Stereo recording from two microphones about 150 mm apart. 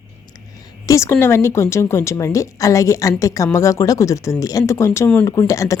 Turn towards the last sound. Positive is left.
turn(degrees=20)  # may be behind; listen again after turning